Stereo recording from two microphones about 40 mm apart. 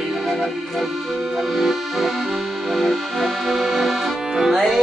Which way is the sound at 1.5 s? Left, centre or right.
Centre.